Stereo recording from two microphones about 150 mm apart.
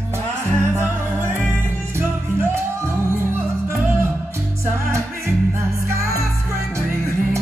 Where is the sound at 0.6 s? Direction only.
15° right (ahead or behind).